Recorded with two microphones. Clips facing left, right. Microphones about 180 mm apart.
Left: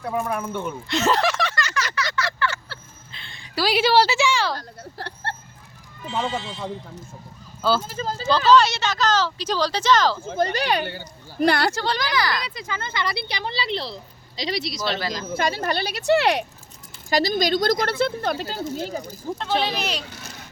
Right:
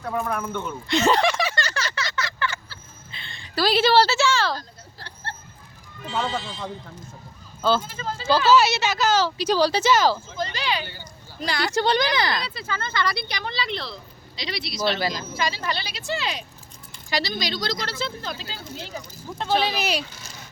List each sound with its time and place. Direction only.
0.0 s speech: 10° left (ahead or behind)
1.5 s a sound: 30° right (ahead or behind)
3.1 s speech: centre (ahead or behind)
4.8 s a sound: 65° left (ahead or behind)
7.8 s speech: 40° left (ahead or behind)
8.3 s speech: 5° right (ahead or behind)
10.2 s speech: 60° left (ahead or behind)
11.7 s speech: 20° right (ahead or behind)
12.5 s speech: 15° left (ahead or behind); by 14.9 s 40° left (ahead or behind)
15.4 s speech: 55° left (ahead or behind)
17.1 s a woman's voice: 45° left (ahead or behind)
19.4 s speech: centre (ahead or behind)